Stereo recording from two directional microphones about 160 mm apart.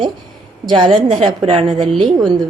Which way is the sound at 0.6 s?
30° right (ahead or behind).